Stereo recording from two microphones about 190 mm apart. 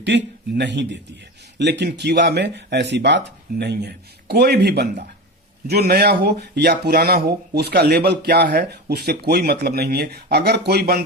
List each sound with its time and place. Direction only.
0.1 s speech: 70° right (ahead or behind)